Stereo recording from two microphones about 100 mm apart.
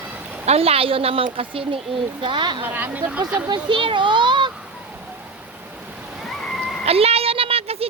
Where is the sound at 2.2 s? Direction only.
50° right (ahead or behind).